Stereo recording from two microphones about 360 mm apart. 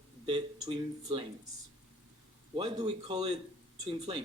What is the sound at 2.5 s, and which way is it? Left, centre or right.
Speech, centre.